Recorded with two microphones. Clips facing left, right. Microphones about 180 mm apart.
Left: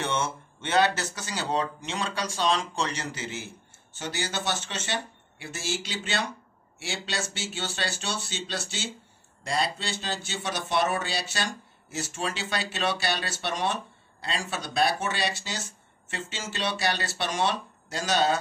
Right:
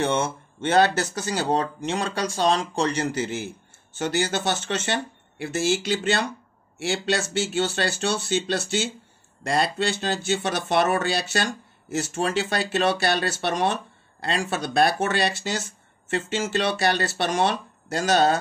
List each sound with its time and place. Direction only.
0.0 s speech: 35° right (ahead or behind)